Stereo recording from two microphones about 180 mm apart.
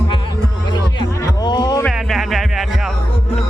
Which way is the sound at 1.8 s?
Centre (ahead or behind).